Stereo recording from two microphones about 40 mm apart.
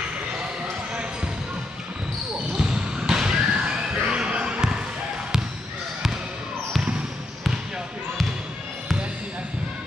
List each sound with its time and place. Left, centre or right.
2.5 s basketball bounce: centre